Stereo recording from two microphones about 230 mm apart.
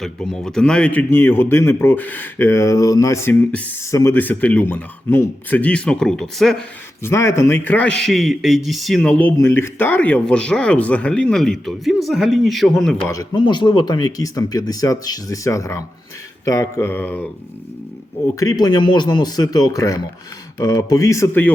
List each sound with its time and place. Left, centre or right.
0.0 s a man's voice: centre
13.1 s a man's voice: centre
18.3 s a man's voice: centre